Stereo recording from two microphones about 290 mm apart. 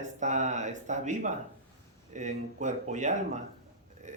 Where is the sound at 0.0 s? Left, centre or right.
Right.